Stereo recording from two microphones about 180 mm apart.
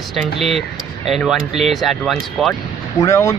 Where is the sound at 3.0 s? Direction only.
15° left (ahead or behind).